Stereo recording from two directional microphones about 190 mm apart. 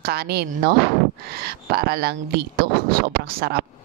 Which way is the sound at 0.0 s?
55° right (ahead or behind).